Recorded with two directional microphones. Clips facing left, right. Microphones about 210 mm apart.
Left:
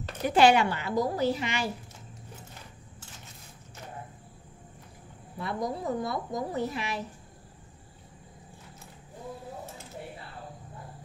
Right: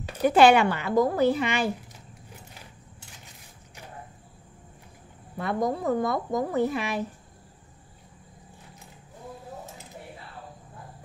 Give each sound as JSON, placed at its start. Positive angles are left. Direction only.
{"t": 0.4, "sound": "a woman's voice", "side_deg": -55}
{"t": 5.5, "sound": "a woman's voice", "side_deg": -50}